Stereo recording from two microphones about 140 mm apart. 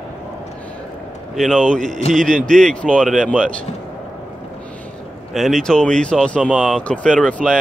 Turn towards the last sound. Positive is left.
turn(degrees=5)  # may be behind; listen again after turning